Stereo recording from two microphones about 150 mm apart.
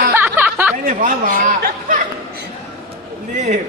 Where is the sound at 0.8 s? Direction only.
65° right (ahead or behind).